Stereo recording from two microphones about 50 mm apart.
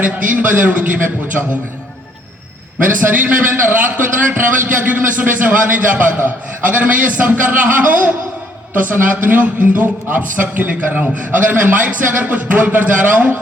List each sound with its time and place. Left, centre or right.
0.0 s a man's voice: right
3.0 s a man's voice: right